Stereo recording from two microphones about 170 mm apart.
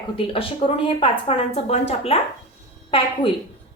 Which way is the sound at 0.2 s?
30° left (ahead or behind).